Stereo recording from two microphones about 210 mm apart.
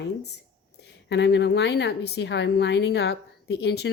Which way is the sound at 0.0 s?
50° left (ahead or behind).